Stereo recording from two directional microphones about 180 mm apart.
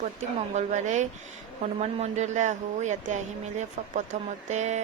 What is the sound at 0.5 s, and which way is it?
Speech, 40° right (ahead or behind).